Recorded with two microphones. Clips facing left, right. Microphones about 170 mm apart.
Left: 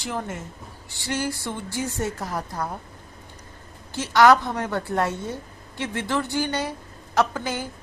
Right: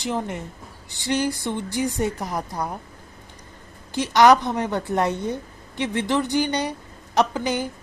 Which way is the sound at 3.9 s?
15° right (ahead or behind).